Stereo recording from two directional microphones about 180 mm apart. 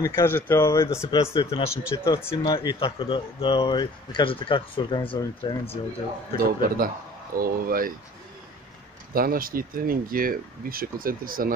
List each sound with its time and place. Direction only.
0.0 s speech: 15° left (ahead or behind)
1.2 s speech: 30° left (ahead or behind)
6.3 s speech: 55° right (ahead or behind)
9.1 s speech: 55° right (ahead or behind)